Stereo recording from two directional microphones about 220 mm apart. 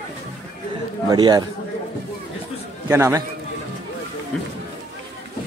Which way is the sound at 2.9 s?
10° right (ahead or behind).